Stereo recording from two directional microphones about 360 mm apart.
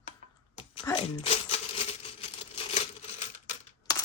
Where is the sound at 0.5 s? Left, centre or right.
Centre.